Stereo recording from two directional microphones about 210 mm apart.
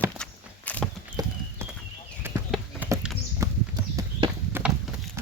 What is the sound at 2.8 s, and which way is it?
Clip-clop, 10° right (ahead or behind).